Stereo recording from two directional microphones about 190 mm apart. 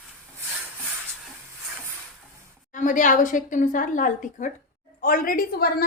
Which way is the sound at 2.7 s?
45° left (ahead or behind).